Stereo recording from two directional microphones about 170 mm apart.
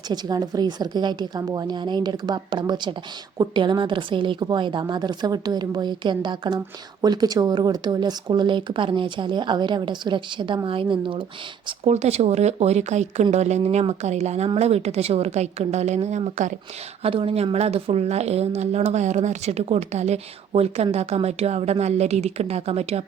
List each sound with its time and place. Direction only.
0.1 s speech: 25° right (ahead or behind)
11.9 s a woman's voice: 40° right (ahead or behind)